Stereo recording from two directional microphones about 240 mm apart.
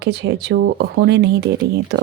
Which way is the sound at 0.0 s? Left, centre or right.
Right.